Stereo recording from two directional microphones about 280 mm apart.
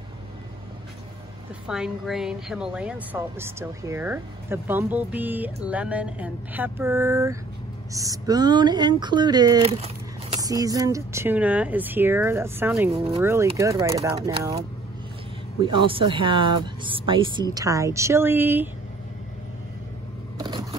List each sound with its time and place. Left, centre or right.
1.7 s speech: centre
15.6 s speech: centre
20.3 s vehicle: centre